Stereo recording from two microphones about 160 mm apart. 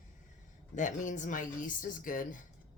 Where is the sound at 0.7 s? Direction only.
50° left (ahead or behind).